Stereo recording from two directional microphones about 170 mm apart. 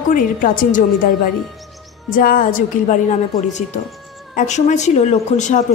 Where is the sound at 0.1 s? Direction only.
50° left (ahead or behind).